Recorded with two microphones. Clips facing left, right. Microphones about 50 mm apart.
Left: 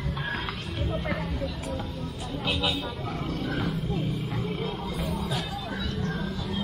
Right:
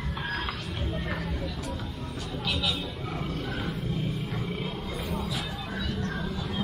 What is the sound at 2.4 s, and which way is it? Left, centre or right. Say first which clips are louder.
Vehicle: left 2 dB; centre.